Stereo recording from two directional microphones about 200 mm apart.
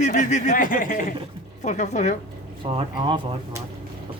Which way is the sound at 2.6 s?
25° right (ahead or behind).